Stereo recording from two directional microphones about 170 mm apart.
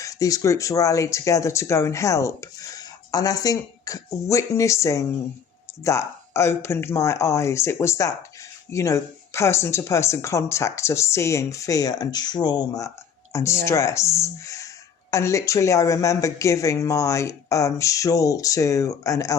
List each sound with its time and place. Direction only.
0.0 s speech: 20° left (ahead or behind)